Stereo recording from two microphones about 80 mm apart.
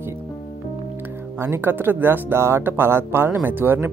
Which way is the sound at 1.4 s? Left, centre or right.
Right.